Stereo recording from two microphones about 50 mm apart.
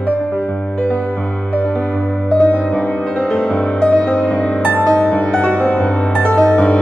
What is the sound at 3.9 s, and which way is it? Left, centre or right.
Music, left.